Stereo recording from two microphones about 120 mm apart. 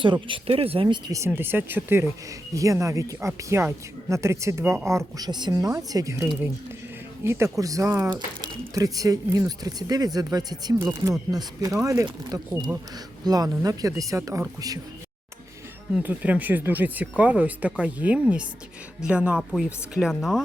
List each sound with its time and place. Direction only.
0.0 s speech: 45° right (ahead or behind)
1.1 s speech: 20° right (ahead or behind)
7.3 s speech: 20° right (ahead or behind)
8.1 s speech: 35° right (ahead or behind)
16.0 s speech: 10° right (ahead or behind)